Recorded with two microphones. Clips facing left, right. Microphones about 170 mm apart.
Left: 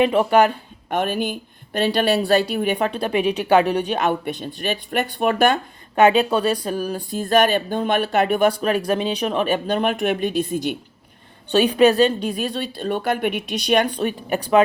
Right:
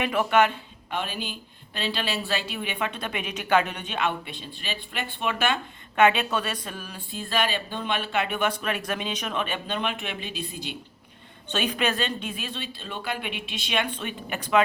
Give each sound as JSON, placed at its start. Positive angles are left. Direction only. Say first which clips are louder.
{"t": 0.0, "sound": "speech", "louder": "left 6 dB", "side_deg": 30}
{"t": 0.9, "sound": "speech", "louder": "left 10 dB", "side_deg": 50}
{"t": 11.4, "sound": "speech", "louder": "left 12 dB", "side_deg": 35}